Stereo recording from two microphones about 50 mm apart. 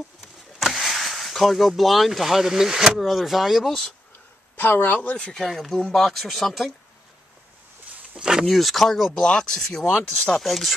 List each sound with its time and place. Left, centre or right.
0.2 s speech: centre
4.6 s speech: left
5.1 s speech: left
5.4 s speech: centre
8.2 s speech: centre
8.5 s speech: centre
9.2 s speech: centre
9.6 s speech: centre